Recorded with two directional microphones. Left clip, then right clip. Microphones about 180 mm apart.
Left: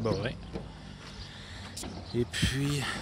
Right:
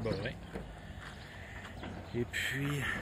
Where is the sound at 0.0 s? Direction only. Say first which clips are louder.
Left 5 dB; 25° left (ahead or behind).